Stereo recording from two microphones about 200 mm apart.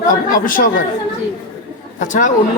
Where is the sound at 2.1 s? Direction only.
40° left (ahead or behind).